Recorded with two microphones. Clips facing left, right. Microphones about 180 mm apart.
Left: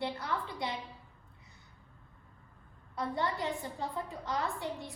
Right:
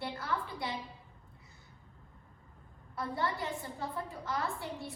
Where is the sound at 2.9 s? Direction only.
20° left (ahead or behind).